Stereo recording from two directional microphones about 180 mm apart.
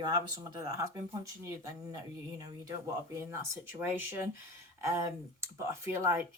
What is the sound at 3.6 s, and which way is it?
Speech, 10° right (ahead or behind).